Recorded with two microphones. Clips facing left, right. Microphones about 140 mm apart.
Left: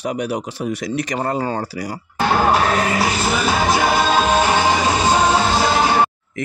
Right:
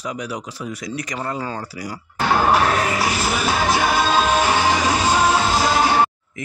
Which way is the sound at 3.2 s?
30° left (ahead or behind).